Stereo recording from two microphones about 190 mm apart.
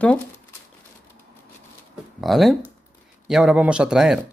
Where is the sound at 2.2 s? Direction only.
Centre (ahead or behind).